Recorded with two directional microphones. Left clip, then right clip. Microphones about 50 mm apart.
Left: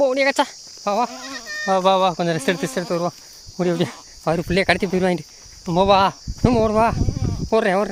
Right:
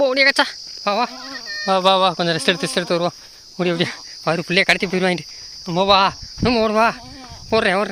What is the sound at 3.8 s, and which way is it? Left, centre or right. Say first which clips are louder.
Cricket: right 2 dB; left.